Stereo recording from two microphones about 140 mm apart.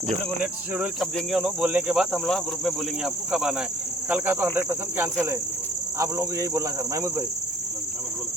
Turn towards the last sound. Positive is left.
turn(degrees=-20)  # may be behind; listen again after turning